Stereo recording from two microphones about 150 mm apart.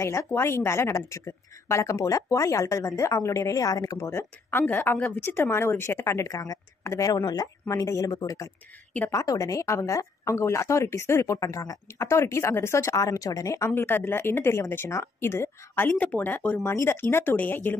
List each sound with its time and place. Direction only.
0.0 s a woman's voice: 20° left (ahead or behind)